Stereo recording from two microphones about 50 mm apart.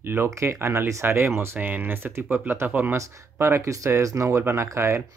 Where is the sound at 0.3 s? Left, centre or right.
Right.